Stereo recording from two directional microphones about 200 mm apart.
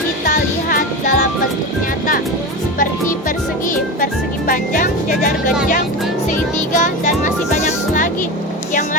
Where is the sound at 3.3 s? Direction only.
40° left (ahead or behind).